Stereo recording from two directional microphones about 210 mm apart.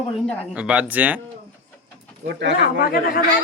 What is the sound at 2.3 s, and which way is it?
Speech, 55° right (ahead or behind).